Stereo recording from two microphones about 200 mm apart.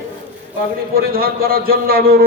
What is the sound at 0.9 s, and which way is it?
A man's voice, 50° right (ahead or behind).